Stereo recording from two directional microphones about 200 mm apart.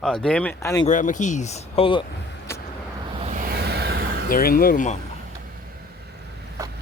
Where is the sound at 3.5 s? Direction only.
55° right (ahead or behind).